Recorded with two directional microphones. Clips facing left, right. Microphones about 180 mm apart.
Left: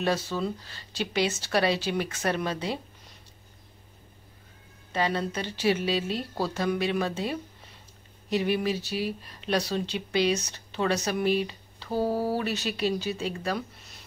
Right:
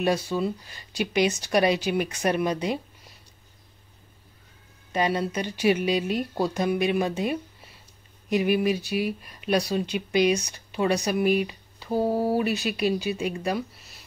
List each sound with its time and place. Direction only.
0.0 s speech: 15° right (ahead or behind)
4.9 s speech: 15° right (ahead or behind)